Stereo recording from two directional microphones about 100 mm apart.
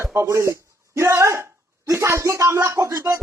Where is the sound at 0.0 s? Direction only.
30° right (ahead or behind).